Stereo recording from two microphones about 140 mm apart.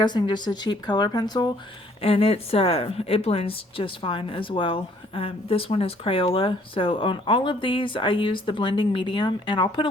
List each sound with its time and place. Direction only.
0.0 s a woman's voice: 30° left (ahead or behind)
2.0 s a woman's voice: 45° left (ahead or behind)